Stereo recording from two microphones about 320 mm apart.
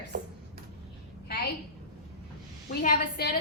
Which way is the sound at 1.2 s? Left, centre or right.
Left.